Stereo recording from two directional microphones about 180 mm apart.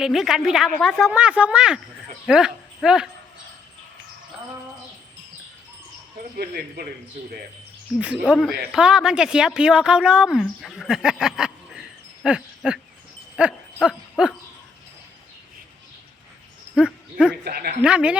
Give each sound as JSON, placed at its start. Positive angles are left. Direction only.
{"t": 0.0, "sound": "a woman's voice", "side_deg": 0}
{"t": 6.3, "sound": "speech", "side_deg": -60}
{"t": 7.9, "sound": "a woman's voice", "side_deg": -5}
{"t": 13.8, "sound": "dog", "side_deg": -5}
{"t": 16.7, "sound": "a sound", "side_deg": -5}
{"t": 17.4, "sound": "speech", "side_deg": -60}
{"t": 17.8, "sound": "a woman's voice", "side_deg": -5}